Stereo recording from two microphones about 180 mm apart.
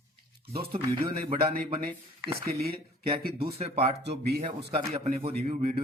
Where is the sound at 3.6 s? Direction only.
35° right (ahead or behind).